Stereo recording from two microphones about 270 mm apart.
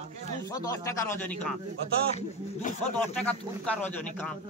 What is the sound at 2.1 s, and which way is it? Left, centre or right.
Speech, left.